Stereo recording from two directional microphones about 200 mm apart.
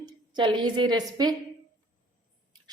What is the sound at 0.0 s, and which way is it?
A woman's voice, 20° right (ahead or behind).